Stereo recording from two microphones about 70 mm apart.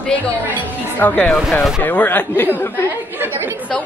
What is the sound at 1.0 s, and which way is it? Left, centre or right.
A man's voice, left.